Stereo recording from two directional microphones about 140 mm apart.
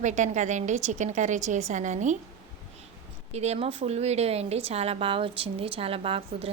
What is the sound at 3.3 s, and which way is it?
A woman's voice, 50° right (ahead or behind).